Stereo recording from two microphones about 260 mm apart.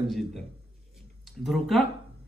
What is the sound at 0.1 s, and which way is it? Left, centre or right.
A man's voice, centre.